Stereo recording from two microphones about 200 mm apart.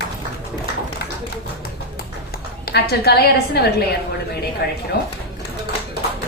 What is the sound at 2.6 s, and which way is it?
A woman's voice, 55° left (ahead or behind).